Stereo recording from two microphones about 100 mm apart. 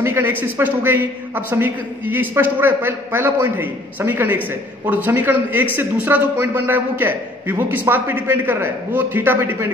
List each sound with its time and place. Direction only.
0.0 s a man's voice: 25° right (ahead or behind)